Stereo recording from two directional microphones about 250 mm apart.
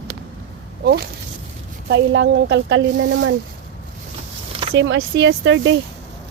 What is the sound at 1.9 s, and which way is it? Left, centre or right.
Speech, right.